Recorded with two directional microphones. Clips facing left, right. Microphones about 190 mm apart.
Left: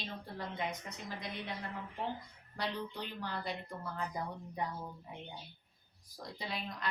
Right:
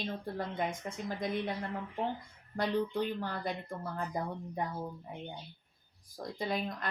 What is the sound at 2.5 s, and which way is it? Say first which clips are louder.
Speech: right 8 dB; 50° right (ahead or behind).